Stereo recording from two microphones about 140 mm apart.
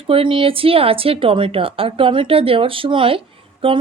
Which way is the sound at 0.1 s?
40° right (ahead or behind).